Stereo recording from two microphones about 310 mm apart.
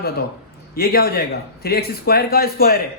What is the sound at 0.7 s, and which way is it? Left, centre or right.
A man's voice, left.